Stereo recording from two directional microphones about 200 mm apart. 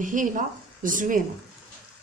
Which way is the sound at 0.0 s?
40° right (ahead or behind).